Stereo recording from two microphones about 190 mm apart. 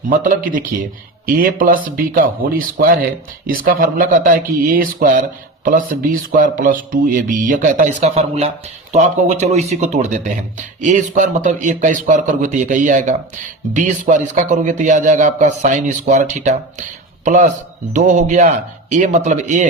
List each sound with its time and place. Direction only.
0.1 s speech: 45° right (ahead or behind)